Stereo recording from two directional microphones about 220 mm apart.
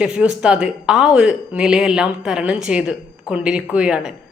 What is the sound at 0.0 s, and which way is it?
Speech, 5° right (ahead or behind).